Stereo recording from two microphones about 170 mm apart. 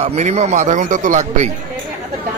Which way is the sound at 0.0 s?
40° right (ahead or behind).